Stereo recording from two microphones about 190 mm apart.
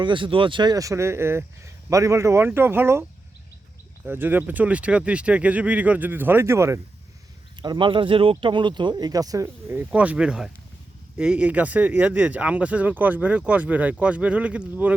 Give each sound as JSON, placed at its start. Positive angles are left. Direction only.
{"t": 0.0, "sound": "speech", "side_deg": -25}
{"t": 7.6, "sound": "speech", "side_deg": -25}